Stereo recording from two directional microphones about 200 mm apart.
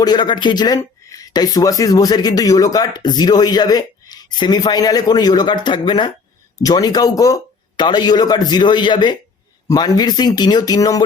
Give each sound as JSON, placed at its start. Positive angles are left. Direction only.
{"t": 0.0, "sound": "speech", "side_deg": 20}